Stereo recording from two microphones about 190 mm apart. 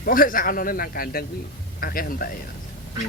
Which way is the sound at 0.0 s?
50° left (ahead or behind).